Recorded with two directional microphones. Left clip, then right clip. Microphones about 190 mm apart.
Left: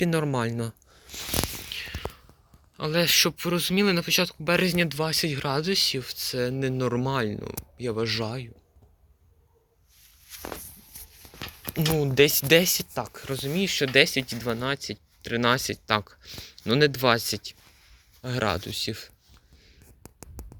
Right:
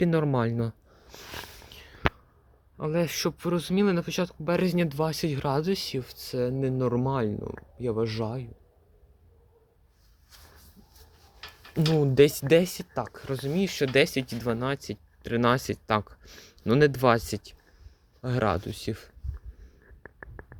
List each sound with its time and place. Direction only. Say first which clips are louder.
0.0 s speech: even; 15° right (ahead or behind)
1.7 s a sound: left 14 dB; 15° right (ahead or behind)
2.7 s speech: left 7 dB; 10° right (ahead or behind)
12.1 s speech: even; 20° right (ahead or behind)
12.5 s speech: left 2 dB; 5° right (ahead or behind)